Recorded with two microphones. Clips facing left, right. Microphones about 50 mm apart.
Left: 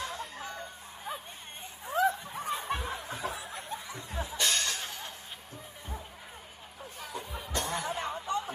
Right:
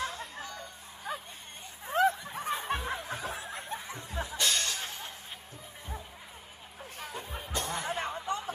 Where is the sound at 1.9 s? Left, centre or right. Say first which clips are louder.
Right 1 dB; right.